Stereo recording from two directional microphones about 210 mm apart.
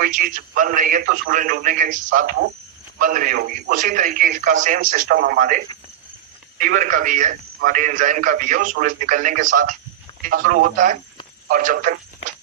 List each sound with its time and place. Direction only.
0.0 s a man's voice: 40° right (ahead or behind)